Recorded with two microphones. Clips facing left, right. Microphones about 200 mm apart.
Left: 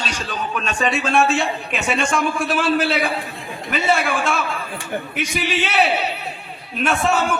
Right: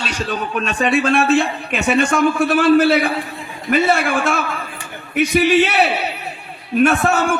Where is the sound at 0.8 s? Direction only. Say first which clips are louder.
Right 3 dB; 60° right (ahead or behind).